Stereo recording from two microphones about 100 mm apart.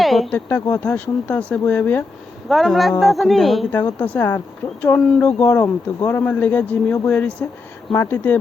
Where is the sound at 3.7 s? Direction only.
20° left (ahead or behind).